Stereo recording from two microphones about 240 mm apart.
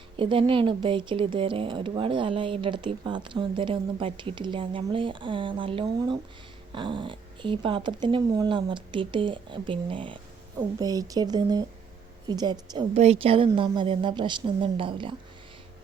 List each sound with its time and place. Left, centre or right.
0.2 s speech: right